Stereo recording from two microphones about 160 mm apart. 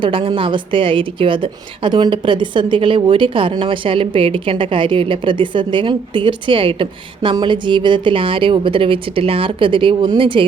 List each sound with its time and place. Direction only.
0.0 s a woman's voice: 35° right (ahead or behind)